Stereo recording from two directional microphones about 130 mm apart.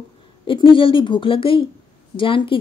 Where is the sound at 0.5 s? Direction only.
40° left (ahead or behind).